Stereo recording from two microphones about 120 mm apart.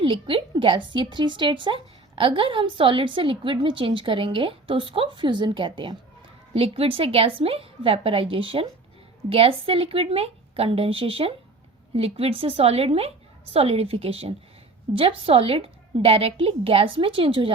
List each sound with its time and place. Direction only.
0.0 s a woman's voice: 45° right (ahead or behind)
6.5 s a woman's voice: 55° right (ahead or behind)